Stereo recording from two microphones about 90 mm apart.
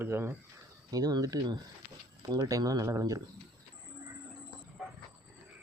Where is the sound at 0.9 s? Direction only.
45° right (ahead or behind).